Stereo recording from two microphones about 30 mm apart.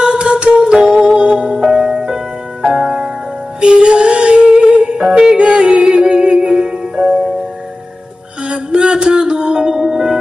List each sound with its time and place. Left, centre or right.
0.0 s a sound: right
0.8 s music: right
3.6 s music: right
5.4 s yodeling: right
6.3 s music: centre
8.5 s music: right
9.8 s music: centre